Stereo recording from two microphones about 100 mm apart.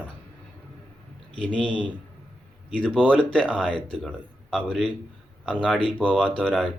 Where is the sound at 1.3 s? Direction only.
10° left (ahead or behind).